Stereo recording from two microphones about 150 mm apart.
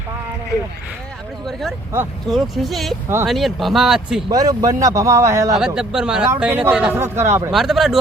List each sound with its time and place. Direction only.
2.2 s a man's voice: centre (ahead or behind)
4.3 s speech: 25° right (ahead or behind)
5.5 s a man's voice: 5° right (ahead or behind)
7.5 s a man's voice: centre (ahead or behind)